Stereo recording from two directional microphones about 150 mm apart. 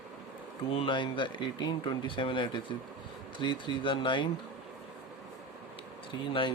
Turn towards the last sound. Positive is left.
turn(degrees=35)  # may be behind; listen again after turning